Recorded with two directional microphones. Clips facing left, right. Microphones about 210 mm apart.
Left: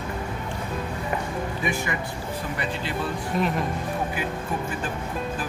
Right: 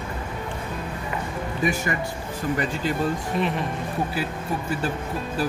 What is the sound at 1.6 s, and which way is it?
Speech, 45° right (ahead or behind).